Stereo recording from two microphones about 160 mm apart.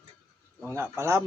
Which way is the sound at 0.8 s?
15° right (ahead or behind).